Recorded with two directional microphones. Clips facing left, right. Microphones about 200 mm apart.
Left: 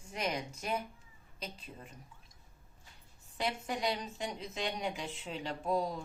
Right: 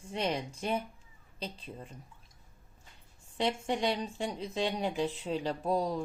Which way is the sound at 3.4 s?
25° right (ahead or behind).